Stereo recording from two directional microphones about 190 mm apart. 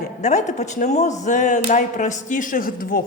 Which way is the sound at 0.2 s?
40° left (ahead or behind).